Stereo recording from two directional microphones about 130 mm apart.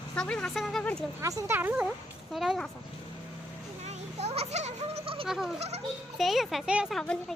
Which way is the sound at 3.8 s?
55° right (ahead or behind).